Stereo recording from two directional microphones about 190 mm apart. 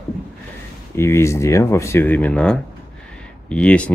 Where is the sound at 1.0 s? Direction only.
15° left (ahead or behind).